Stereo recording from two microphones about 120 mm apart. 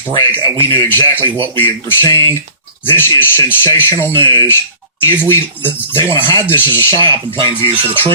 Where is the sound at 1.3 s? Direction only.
45° right (ahead or behind).